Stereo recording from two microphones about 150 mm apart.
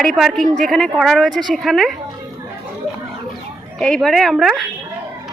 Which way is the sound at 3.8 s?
5° left (ahead or behind).